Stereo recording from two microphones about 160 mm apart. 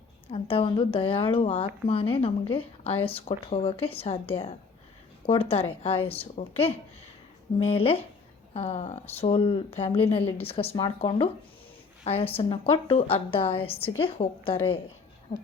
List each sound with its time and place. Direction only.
0.3 s speech: 35° left (ahead or behind)